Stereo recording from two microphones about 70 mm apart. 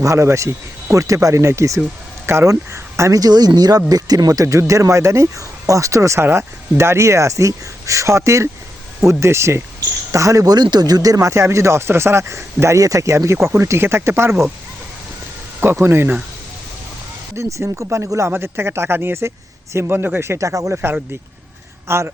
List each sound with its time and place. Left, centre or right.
0.0 s speech: right
15.6 s speech: right
17.3 s speech: right
21.8 s speech: right